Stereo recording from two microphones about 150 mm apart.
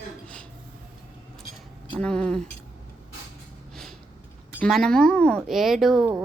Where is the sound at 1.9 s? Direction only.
5° left (ahead or behind).